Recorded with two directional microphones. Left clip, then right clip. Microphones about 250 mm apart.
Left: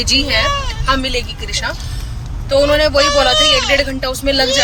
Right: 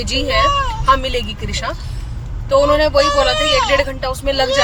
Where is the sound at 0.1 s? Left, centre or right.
Centre.